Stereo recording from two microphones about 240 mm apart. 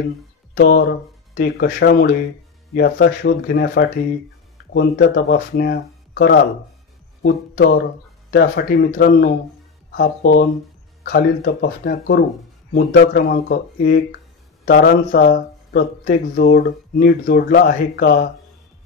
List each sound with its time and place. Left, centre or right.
0.6 s speech: left